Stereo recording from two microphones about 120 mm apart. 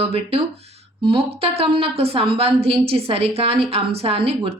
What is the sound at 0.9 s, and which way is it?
A woman's voice, 45° right (ahead or behind).